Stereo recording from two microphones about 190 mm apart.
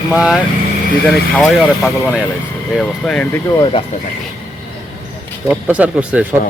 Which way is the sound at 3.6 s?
30° left (ahead or behind).